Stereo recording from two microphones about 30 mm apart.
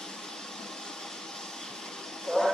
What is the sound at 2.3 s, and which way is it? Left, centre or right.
Vehicle, centre.